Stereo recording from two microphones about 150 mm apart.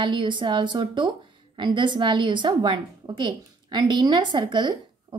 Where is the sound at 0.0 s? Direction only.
30° right (ahead or behind).